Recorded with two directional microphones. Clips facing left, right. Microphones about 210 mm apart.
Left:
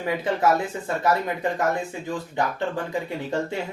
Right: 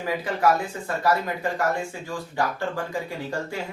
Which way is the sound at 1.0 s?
20° left (ahead or behind).